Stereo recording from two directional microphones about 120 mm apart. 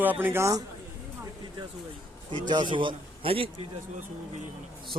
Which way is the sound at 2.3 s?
40° right (ahead or behind).